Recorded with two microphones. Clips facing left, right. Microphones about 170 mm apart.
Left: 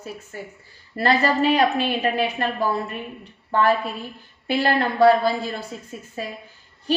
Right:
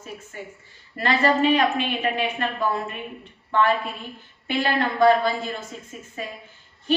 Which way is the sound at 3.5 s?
35° left (ahead or behind).